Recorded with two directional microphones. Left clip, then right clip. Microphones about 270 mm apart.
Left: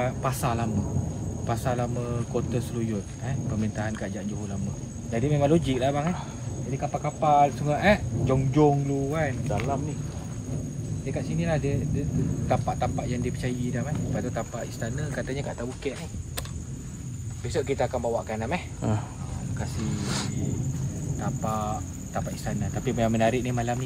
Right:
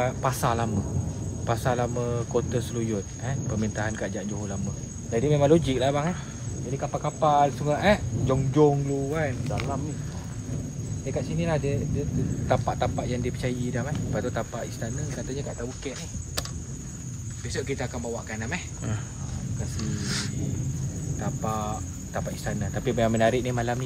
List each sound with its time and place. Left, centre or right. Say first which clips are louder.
0.0 s speech: right 2 dB; centre
11.1 s speech: right 1 dB; centre
17.6 s speech: left 5 dB; centre
21.2 s speech: even; centre